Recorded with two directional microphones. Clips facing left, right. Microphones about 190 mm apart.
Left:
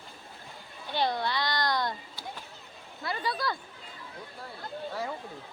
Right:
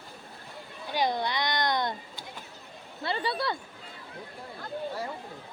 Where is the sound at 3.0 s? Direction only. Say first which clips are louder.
Right 2 dB; 30° right (ahead or behind).